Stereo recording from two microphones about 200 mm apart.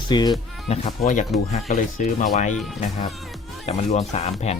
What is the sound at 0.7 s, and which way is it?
Speech, 30° left (ahead or behind).